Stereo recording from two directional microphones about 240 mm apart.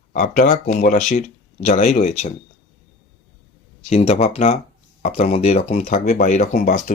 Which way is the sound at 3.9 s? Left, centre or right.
Left.